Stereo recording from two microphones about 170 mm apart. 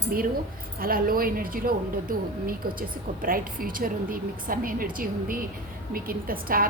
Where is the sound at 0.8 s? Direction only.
60° right (ahead or behind).